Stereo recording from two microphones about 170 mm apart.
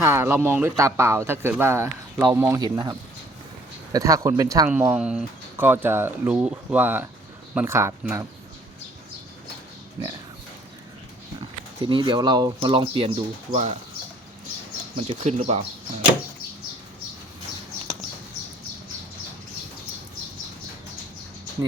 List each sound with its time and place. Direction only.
0.0 s speech: 15° right (ahead or behind)
3.9 s speech: 20° right (ahead or behind)
11.8 s speech: 30° right (ahead or behind)
15.0 s speech: 40° right (ahead or behind)